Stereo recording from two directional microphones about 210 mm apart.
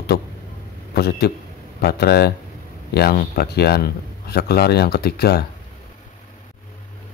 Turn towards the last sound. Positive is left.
turn(degrees=50)  # may be behind; listen again after turning